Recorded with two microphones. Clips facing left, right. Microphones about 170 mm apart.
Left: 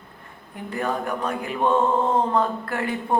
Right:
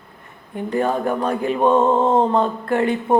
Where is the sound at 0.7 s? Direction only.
30° right (ahead or behind).